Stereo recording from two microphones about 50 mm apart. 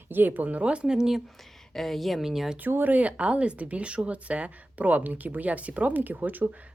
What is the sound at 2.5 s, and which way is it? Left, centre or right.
Speech, right.